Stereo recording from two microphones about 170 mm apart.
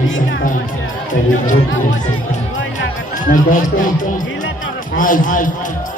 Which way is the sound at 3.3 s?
50° left (ahead or behind).